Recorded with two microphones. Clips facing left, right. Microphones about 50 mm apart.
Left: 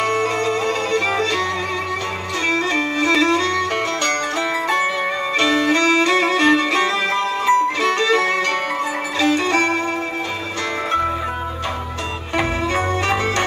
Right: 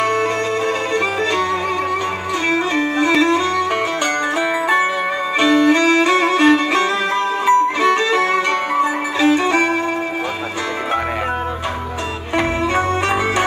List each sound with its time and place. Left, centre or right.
0.0 s music: centre
2.5 s music: centre